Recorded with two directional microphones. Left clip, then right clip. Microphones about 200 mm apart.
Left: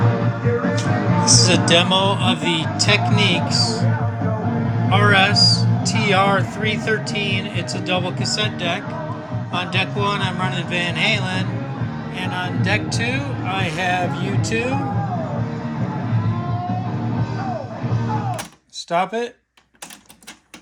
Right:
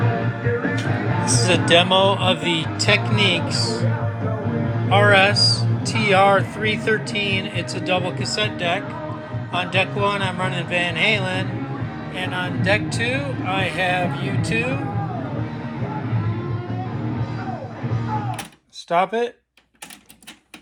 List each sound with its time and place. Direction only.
1.3 s speech: 15° left (ahead or behind)
4.9 s speech: 5° left (ahead or behind)
18.9 s speech: 10° left (ahead or behind)